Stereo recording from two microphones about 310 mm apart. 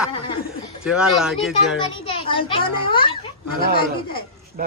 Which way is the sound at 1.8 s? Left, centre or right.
Centre.